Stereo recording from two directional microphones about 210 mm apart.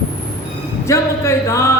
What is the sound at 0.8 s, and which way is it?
Speech, 15° left (ahead or behind).